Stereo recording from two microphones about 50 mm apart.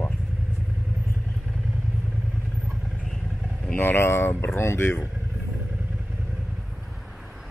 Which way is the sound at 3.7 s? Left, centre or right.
Left.